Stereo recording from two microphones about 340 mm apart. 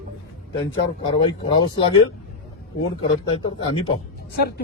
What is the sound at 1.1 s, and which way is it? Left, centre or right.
Speech, centre.